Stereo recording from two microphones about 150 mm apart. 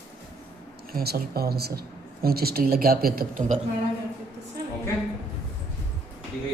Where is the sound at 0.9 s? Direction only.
90° right; by 3.6 s 70° right (ahead or behind).